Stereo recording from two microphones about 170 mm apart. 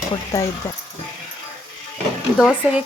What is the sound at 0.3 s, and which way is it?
Speech, 20° left (ahead or behind).